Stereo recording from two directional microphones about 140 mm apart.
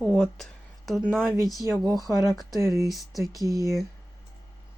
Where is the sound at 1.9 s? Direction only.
25° left (ahead or behind).